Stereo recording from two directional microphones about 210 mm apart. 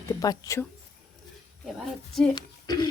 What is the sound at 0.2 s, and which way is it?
Speech, 15° left (ahead or behind).